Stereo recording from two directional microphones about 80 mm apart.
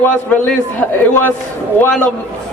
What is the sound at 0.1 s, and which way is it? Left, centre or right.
A man's voice, left.